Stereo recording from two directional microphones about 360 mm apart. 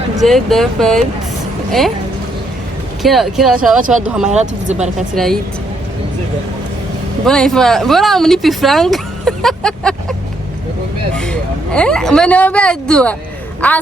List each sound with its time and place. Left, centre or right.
0.2 s speech: centre
3.0 s speech: centre
4.3 s speech: centre
5.1 s speech: centre
7.3 s speech: centre